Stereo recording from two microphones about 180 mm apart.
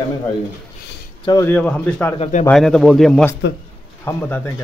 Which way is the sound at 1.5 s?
10° left (ahead or behind).